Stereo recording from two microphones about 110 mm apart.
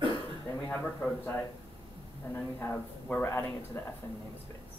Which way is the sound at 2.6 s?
15° left (ahead or behind).